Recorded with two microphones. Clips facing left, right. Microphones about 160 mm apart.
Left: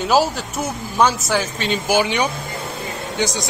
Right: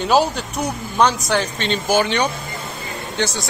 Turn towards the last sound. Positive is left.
turn(degrees=15)  # may be behind; listen again after turning